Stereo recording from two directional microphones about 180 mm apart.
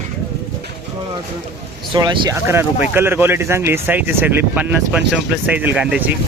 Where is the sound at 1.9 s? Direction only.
25° right (ahead or behind); by 6.0 s 5° right (ahead or behind).